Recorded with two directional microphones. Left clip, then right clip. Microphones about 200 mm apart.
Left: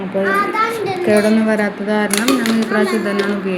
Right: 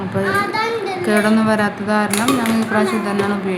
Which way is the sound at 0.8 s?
10° right (ahead or behind).